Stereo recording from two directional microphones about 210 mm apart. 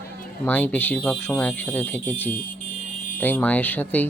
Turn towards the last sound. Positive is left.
turn(degrees=10)  # may be behind; listen again after turning